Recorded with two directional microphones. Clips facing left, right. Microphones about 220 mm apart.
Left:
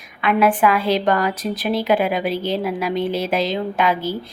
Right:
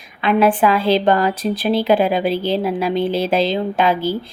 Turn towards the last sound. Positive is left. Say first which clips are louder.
# right 3 dB
turn(degrees=-30)  # may be behind; listen again after turning